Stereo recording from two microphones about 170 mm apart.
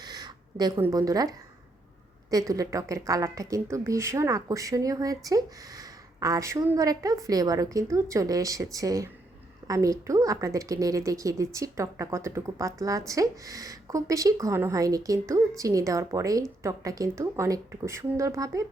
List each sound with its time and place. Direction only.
0.0 s speech: 25° right (ahead or behind)
2.5 s a woman's voice: 20° right (ahead or behind)